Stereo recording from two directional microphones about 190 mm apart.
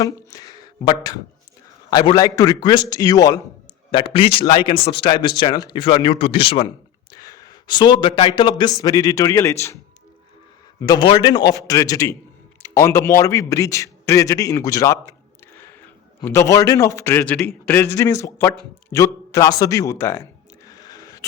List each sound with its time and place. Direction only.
0.0 s speech: 20° left (ahead or behind)
7.1 s a sound: 20° left (ahead or behind)
8.4 s a man's voice: 25° left (ahead or behind)
10.8 s a man's voice: 20° left (ahead or behind)
16.2 s a man's voice: 15° left (ahead or behind)
20.7 s a sound: 20° left (ahead or behind)